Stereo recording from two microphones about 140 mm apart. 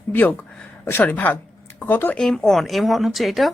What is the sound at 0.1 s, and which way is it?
A woman's voice, 10° left (ahead or behind).